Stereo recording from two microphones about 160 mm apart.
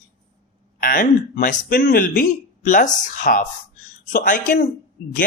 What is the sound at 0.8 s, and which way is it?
Speech, 60° left (ahead or behind).